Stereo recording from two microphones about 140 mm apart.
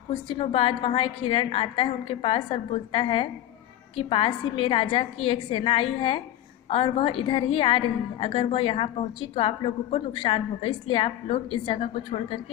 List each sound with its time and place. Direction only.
0.1 s a woman's voice: 40° left (ahead or behind)